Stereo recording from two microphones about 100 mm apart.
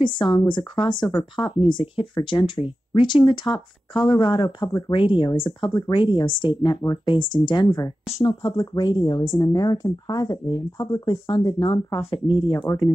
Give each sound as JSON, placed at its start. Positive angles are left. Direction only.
{"t": 0.0, "sound": "speech", "side_deg": 55}
{"t": 12.0, "sound": "speech", "side_deg": 65}